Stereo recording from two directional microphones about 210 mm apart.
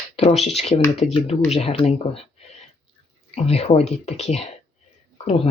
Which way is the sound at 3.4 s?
30° left (ahead or behind).